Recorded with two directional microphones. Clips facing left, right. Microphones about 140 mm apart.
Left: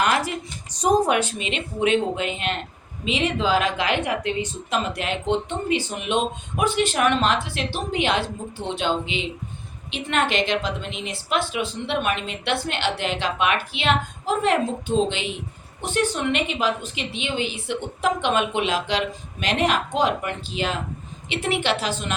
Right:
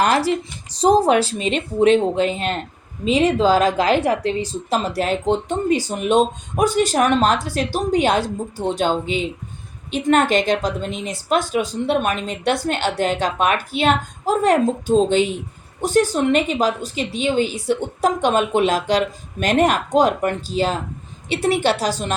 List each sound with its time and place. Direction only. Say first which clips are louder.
0.0 s a woman's voice: right 5 dB; 35° right (ahead or behind)